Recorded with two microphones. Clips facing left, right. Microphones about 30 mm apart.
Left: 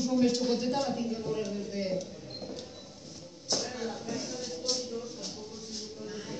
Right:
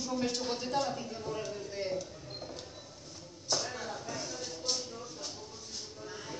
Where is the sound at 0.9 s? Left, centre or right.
Centre.